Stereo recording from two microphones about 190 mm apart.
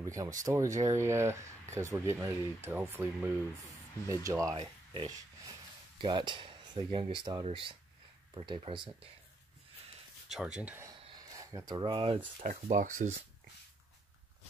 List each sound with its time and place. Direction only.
0.0 s speech: 15° right (ahead or behind)
10.2 s speech: 5° right (ahead or behind)
11.0 s rub: 20° right (ahead or behind)
12.4 s speech: 40° right (ahead or behind)